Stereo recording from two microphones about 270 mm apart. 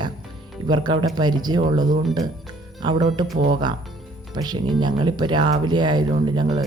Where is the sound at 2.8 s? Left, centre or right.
Centre.